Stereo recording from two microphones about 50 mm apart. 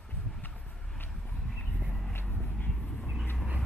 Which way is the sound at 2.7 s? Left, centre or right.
Centre.